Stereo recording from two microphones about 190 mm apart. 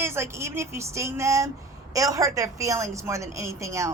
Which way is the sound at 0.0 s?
15° right (ahead or behind).